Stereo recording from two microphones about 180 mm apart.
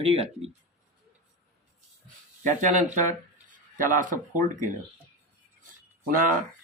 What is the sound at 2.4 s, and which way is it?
Speech, 45° right (ahead or behind).